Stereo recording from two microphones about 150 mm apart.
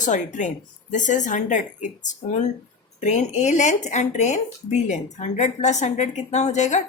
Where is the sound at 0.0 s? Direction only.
55° left (ahead or behind).